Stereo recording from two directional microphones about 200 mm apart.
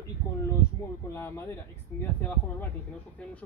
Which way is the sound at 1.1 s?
10° left (ahead or behind).